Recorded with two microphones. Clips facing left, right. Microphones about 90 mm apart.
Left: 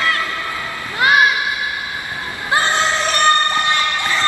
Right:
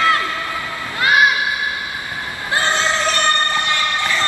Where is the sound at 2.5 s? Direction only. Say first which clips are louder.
Left 2 dB; 20° left (ahead or behind).